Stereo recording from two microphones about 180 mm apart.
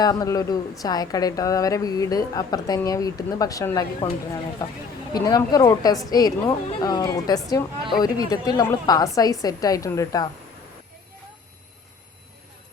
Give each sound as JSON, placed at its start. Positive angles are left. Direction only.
{"t": 0.0, "sound": "a woman's voice", "side_deg": 20}
{"t": 5.1, "sound": "a woman's voice", "side_deg": 20}